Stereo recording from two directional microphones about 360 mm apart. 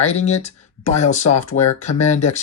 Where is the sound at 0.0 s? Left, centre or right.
Centre.